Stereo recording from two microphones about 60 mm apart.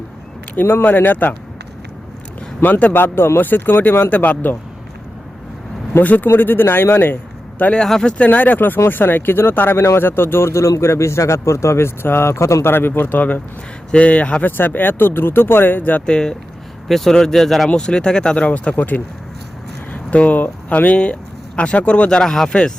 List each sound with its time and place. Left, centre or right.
0.5 s speech: left
2.6 s speech: left
2.9 s speech: left
6.0 s speech: left
7.8 s speech: centre
8.2 s speech: left
12.7 s speech: left
14.5 s speech: left
16.0 s speech: centre
16.9 s speech: centre
22.2 s speech: centre